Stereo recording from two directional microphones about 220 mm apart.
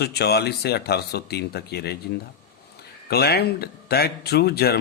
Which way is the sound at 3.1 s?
45° left (ahead or behind).